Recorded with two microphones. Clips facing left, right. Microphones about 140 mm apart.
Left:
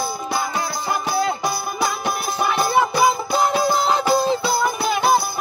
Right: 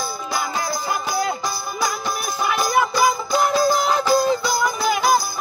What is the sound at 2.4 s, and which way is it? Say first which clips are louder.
Music: left 1 dB; 25° left (ahead or behind).